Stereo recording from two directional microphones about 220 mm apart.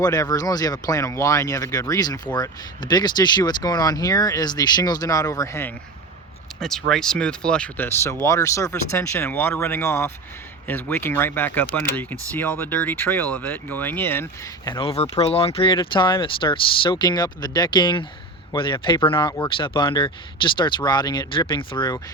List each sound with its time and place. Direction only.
0.0 s speech: 15° left (ahead or behind)
6.6 s speech: centre (ahead or behind); by 22.0 s 20° left (ahead or behind)